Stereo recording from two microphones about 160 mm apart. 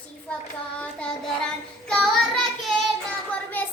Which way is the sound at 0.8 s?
5° left (ahead or behind).